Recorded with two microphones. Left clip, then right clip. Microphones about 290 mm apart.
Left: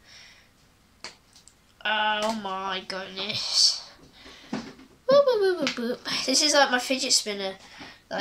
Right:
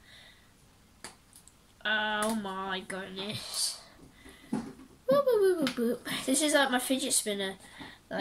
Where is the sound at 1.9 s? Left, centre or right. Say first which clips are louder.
Left 6 dB; left.